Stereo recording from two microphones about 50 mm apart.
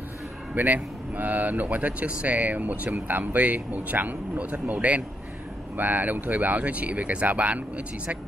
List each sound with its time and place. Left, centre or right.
0.6 s speech: right
5.8 s speech: right